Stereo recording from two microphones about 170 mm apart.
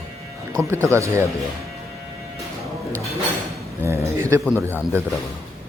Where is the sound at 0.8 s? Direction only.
15° right (ahead or behind).